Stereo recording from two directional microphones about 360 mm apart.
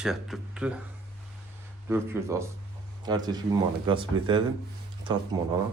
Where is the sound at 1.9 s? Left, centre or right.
Centre.